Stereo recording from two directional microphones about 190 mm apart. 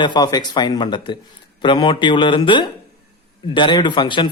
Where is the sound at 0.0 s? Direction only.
20° left (ahead or behind).